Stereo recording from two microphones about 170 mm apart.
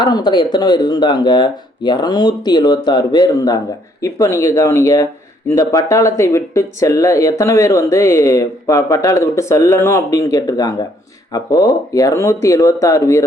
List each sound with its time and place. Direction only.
0.0 s speech: 25° left (ahead or behind)